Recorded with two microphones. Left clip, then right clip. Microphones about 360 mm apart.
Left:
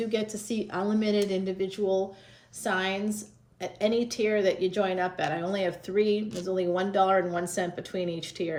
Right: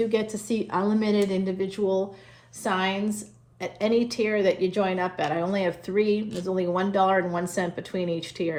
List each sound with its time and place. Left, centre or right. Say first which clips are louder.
0.0 s a woman's voice: right 5 dB; centre